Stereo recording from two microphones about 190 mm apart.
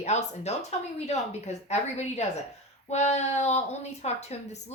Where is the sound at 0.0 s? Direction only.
35° left (ahead or behind).